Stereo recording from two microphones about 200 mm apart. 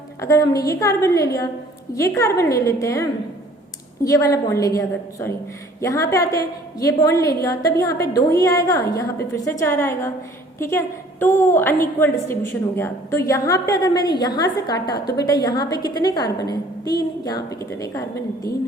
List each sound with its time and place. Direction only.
0.2 s a woman's voice: 15° left (ahead or behind)